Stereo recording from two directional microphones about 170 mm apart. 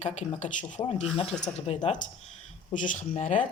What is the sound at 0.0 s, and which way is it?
Speech, 40° left (ahead or behind).